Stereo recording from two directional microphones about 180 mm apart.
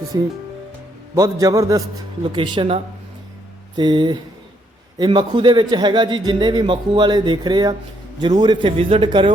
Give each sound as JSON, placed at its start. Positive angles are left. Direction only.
{"t": 0.1, "sound": "a man's voice", "side_deg": -20}